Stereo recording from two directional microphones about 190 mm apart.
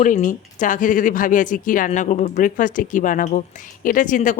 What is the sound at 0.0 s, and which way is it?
Speech, 40° left (ahead or behind).